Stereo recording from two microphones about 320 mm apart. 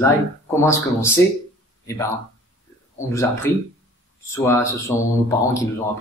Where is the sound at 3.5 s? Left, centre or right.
Centre.